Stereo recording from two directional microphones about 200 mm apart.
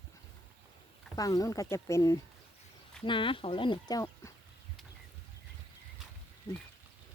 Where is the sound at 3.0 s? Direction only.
25° left (ahead or behind).